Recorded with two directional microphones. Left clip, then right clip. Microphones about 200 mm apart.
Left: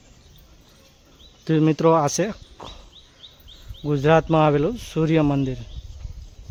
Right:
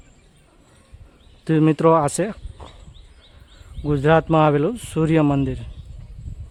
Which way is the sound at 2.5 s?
10° left (ahead or behind).